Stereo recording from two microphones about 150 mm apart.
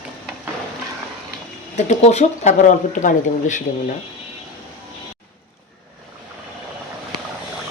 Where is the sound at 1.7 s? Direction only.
50° left (ahead or behind).